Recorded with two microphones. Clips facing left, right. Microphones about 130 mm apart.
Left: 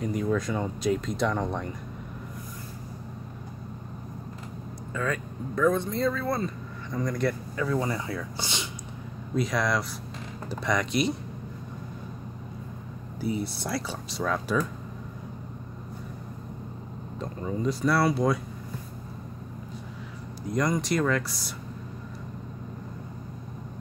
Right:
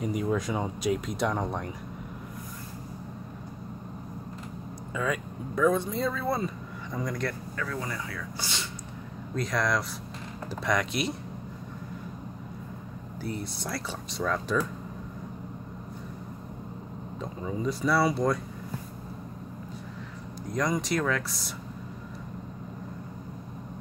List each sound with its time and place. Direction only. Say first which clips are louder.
0.0 s speech: left 1 dB; 15° right (ahead or behind)
4.9 s speech: even; 10° right (ahead or behind)
7.5 s speech: left 6 dB; 20° left (ahead or behind)
9.3 s speech: left 2 dB; 5° left (ahead or behind)
13.2 s speech: left 5 dB; 5° left (ahead or behind)
17.2 s speech: left 2 dB; 5° right (ahead or behind)
20.4 s speech: left 2 dB; centre (ahead or behind)